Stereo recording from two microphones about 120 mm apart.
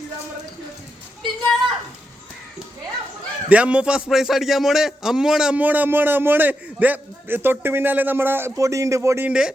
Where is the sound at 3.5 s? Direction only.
10° right (ahead or behind).